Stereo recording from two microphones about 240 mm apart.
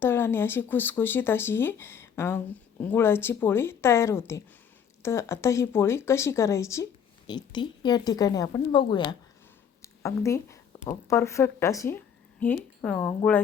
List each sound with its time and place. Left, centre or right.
0.0 s speech: centre